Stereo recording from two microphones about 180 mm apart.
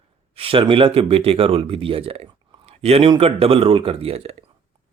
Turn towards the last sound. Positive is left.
turn(degrees=-35)  # may be behind; listen again after turning